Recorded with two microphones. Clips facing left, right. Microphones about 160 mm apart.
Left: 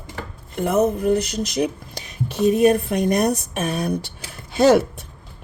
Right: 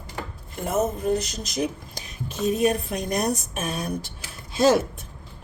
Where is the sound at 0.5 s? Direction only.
65° left (ahead or behind).